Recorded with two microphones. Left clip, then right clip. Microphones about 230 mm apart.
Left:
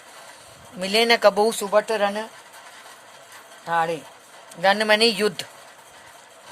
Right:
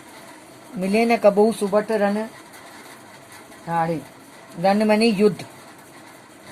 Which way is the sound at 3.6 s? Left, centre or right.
Left.